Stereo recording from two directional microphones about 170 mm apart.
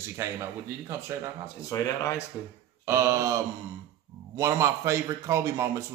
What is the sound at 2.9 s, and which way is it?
A man's voice, 15° right (ahead or behind).